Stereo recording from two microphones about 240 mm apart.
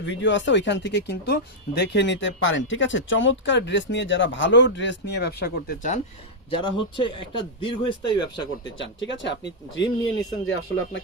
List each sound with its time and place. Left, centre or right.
0.0 s speech: left
6.5 s speech: left
8.8 s speech: left